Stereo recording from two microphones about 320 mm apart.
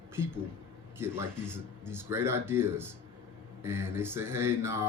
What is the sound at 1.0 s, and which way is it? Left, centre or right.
Speech, centre.